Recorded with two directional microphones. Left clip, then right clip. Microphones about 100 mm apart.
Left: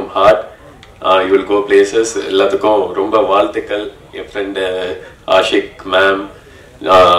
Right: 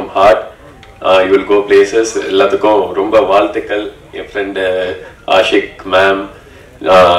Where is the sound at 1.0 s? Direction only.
20° left (ahead or behind).